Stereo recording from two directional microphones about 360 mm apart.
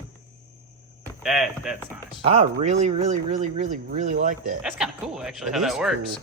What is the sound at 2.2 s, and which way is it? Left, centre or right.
Speech, centre.